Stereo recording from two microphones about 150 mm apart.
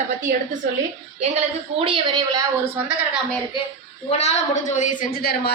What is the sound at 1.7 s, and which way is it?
Speech, 35° right (ahead or behind).